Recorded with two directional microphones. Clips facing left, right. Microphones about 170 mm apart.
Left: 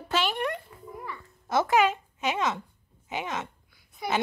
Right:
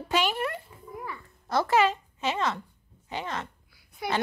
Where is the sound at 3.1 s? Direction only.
20° left (ahead or behind).